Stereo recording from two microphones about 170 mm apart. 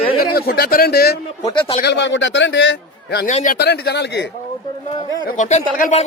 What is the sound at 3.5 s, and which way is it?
Speech, 75° left (ahead or behind).